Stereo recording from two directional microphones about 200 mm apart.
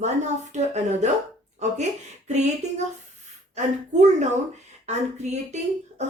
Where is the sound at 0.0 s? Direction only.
35° right (ahead or behind).